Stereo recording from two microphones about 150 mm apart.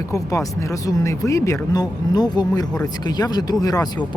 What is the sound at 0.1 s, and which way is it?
Speech, 20° left (ahead or behind).